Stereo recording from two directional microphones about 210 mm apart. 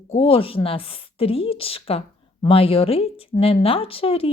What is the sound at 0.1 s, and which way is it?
Speech, 25° left (ahead or behind).